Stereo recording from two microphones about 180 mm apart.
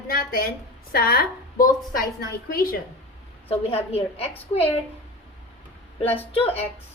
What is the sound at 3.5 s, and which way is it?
A woman's voice, 35° left (ahead or behind).